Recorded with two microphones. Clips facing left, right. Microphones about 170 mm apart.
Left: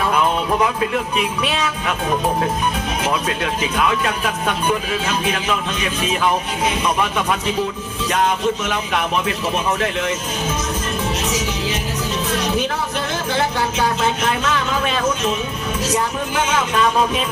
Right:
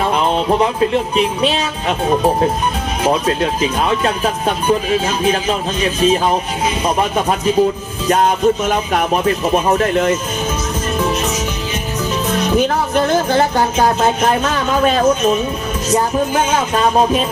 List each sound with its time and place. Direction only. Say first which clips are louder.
0.0 s music: right 3 dB; 30° right (ahead or behind)
3.1 s speech: right 8 dB; 30° right (ahead or behind); by 10.2 s 50° right (ahead or behind)
12.7 s speech: right 9 dB; 50° right (ahead or behind); by 17.2 s 35° right (ahead or behind)